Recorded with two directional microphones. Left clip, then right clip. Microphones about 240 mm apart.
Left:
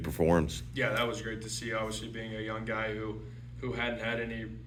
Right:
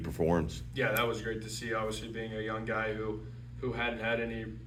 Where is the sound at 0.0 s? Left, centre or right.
Left.